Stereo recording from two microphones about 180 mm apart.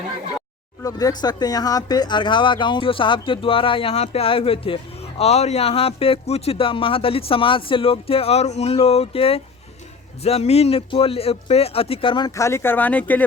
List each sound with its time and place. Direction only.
0.8 s speech: 20° left (ahead or behind)